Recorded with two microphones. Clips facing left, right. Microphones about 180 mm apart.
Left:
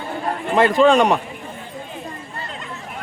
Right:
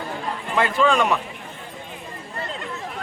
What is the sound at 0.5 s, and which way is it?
Speech, 40° left (ahead or behind).